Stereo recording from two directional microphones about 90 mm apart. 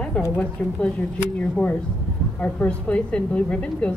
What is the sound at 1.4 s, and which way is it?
A woman's voice, 15° left (ahead or behind).